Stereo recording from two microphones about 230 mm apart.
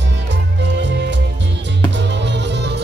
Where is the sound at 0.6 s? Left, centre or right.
Right.